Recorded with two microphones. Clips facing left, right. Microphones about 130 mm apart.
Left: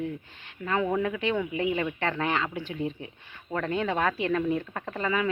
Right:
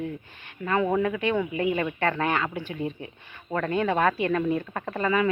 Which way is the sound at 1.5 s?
50° right (ahead or behind).